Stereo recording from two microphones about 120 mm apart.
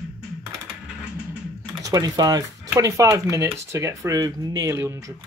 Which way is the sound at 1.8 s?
30° right (ahead or behind).